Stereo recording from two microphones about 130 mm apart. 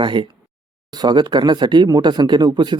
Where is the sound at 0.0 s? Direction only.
40° right (ahead or behind).